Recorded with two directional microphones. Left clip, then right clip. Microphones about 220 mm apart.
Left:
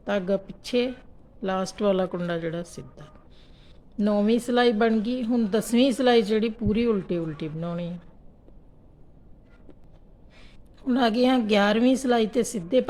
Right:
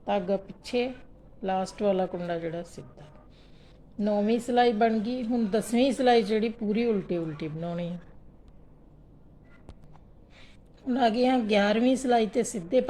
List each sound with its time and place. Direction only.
0.0 s a woman's voice: 25° left (ahead or behind); by 8.0 s 5° left (ahead or behind)
10.8 s a woman's voice: 20° left (ahead or behind)